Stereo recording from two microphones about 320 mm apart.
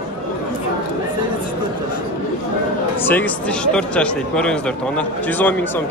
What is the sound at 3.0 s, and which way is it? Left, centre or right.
Speech, centre.